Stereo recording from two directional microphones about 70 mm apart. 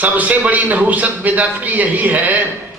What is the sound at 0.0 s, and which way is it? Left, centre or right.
A man's voice, right.